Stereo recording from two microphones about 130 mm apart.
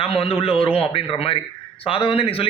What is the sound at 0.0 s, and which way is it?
A man's voice, 50° left (ahead or behind).